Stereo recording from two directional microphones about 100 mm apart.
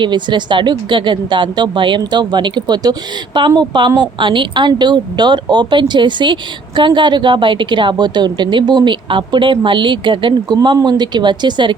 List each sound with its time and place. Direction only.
0.0 s speech: 50° right (ahead or behind)